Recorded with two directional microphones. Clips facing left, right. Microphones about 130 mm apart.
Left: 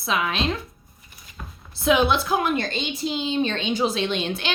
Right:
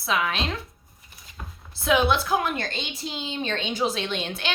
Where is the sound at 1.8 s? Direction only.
20° left (ahead or behind).